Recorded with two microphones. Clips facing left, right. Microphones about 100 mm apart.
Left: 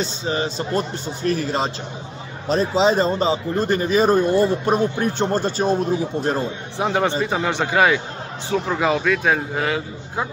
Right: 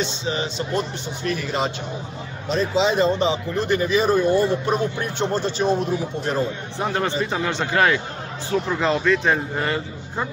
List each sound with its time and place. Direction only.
0.0 s speech: 40° left (ahead or behind)
6.8 s a man's voice: 15° left (ahead or behind)